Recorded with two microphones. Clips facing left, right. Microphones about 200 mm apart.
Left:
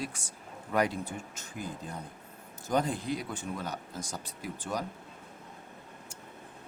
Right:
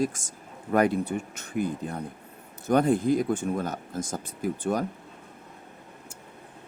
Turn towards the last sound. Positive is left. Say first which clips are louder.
# right 9 dB
turn(degrees=-50)  # may be behind; listen again after turning